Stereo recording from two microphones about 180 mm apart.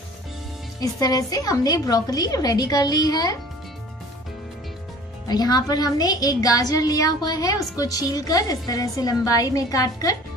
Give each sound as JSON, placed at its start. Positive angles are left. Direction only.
{"t": 0.7, "sound": "a woman's voice", "side_deg": 20}
{"t": 5.3, "sound": "a woman's voice", "side_deg": 20}